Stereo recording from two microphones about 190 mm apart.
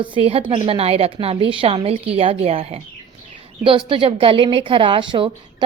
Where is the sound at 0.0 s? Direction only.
30° right (ahead or behind).